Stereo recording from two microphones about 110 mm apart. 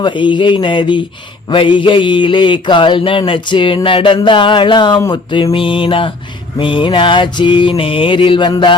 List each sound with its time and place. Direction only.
0.0 s mantra: 45° left (ahead or behind)